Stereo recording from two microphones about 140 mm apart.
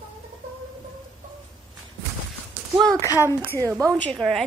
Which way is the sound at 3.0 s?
20° left (ahead or behind).